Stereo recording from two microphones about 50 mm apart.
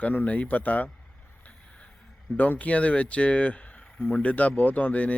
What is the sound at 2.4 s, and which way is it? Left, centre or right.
Speech, left.